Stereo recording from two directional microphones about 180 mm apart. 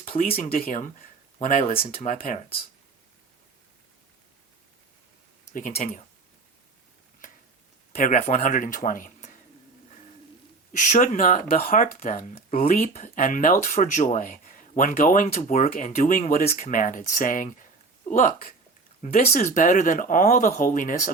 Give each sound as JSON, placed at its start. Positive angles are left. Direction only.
{"t": 0.3, "sound": "speech", "side_deg": 55}
{"t": 2.0, "sound": "speech", "side_deg": 45}
{"t": 5.5, "sound": "speech", "side_deg": 45}
{"t": 7.9, "sound": "speech", "side_deg": 55}
{"t": 8.2, "sound": "speech", "side_deg": 40}
{"t": 10.7, "sound": "speech", "side_deg": 45}
{"t": 19.0, "sound": "speech", "side_deg": 35}
{"t": 19.3, "sound": "speech", "side_deg": 45}